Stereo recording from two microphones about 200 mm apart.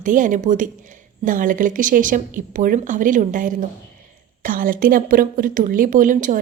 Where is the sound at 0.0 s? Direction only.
40° right (ahead or behind).